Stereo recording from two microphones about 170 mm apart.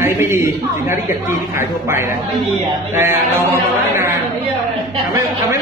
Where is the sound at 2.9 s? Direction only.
15° right (ahead or behind).